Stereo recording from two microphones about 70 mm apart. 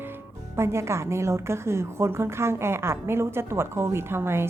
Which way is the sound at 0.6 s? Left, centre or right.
Right.